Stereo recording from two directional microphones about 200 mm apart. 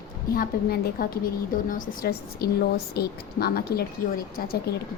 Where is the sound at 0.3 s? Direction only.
45° left (ahead or behind).